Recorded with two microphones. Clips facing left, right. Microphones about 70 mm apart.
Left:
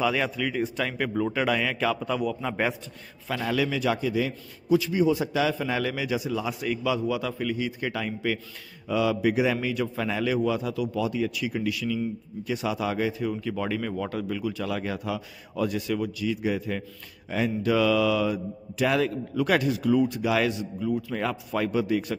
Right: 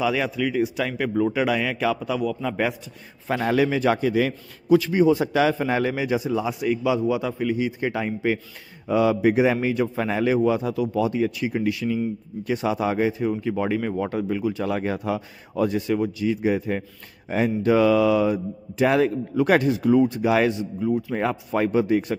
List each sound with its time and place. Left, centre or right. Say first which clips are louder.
0.0 s speech: right 3 dB; centre
3.3 s a man's voice: right 6 dB; right
6.4 s a man's voice: right 5 dB; centre